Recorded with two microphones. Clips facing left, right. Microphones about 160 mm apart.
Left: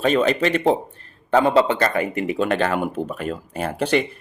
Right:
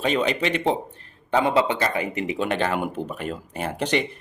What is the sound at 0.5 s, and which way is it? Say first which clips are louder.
Speech: left 4 dB; 45° left (ahead or behind).